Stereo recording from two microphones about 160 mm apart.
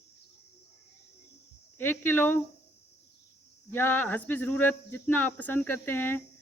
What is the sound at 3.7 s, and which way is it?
Speech, 10° left (ahead or behind).